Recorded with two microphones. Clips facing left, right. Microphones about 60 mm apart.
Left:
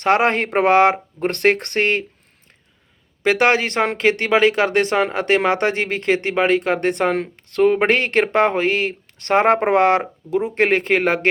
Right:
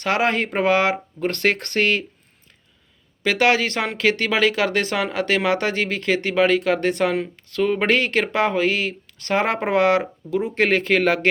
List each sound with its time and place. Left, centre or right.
0.0 s speech: left
3.2 s speech: left